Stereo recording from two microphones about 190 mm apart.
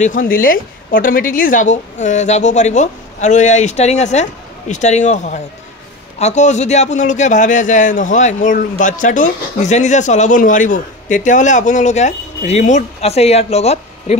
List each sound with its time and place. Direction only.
0.0 s a man's voice: 45° left (ahead or behind)